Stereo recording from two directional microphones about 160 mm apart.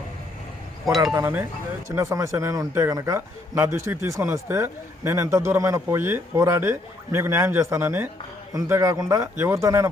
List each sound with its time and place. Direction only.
1.1 s a man's voice: 10° right (ahead or behind)